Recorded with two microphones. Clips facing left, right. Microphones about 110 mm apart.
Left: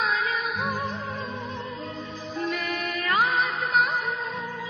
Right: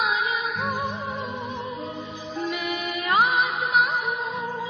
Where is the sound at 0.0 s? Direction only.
15° right (ahead or behind).